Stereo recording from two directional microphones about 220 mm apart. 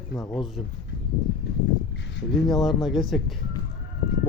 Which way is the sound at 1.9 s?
55° left (ahead or behind).